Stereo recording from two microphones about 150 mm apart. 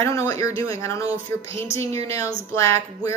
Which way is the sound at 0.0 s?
20° left (ahead or behind).